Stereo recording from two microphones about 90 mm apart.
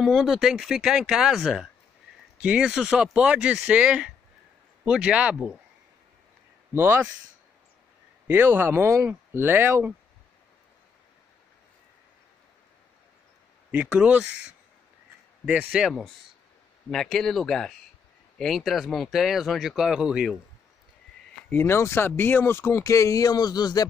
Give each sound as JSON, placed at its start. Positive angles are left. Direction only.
{"t": 0.0, "sound": "speech", "side_deg": 0}
{"t": 6.7, "sound": "speech", "side_deg": -25}
{"t": 8.3, "sound": "speech", "side_deg": -25}
{"t": 13.7, "sound": "speech", "side_deg": -20}
{"t": 15.4, "sound": "speech", "side_deg": -10}
{"t": 16.9, "sound": "speech", "side_deg": 5}
{"t": 21.5, "sound": "speech", "side_deg": 25}